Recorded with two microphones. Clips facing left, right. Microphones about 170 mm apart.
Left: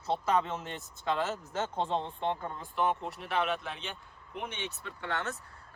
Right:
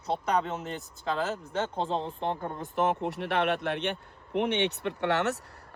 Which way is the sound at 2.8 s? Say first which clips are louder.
Right 4 dB; 65° right (ahead or behind).